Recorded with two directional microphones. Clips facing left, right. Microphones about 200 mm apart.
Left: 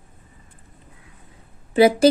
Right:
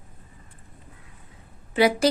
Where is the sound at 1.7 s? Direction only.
25° left (ahead or behind).